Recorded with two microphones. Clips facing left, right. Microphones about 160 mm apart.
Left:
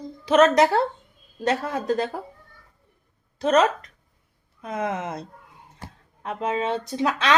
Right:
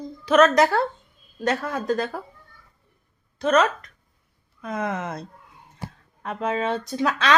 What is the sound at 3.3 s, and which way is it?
A woman's voice, 35° left (ahead or behind).